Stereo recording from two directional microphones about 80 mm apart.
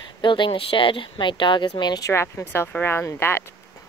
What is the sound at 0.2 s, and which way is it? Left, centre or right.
Speech, left.